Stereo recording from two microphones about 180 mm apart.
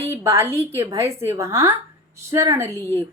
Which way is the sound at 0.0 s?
15° right (ahead or behind).